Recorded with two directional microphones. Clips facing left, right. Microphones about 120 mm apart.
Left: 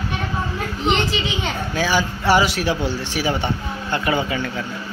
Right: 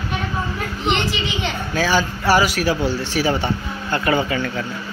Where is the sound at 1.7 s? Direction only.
15° left (ahead or behind).